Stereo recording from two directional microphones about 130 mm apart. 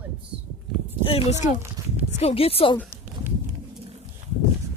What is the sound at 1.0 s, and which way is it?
Speech, 45° left (ahead or behind).